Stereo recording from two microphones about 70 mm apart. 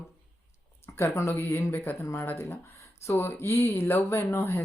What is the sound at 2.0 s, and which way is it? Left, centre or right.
Speech, left.